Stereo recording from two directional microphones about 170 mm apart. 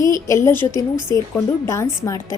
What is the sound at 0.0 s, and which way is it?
A woman's voice, 20° left (ahead or behind).